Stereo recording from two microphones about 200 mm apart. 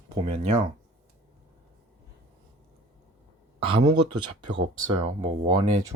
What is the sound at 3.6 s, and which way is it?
Speech, 25° right (ahead or behind).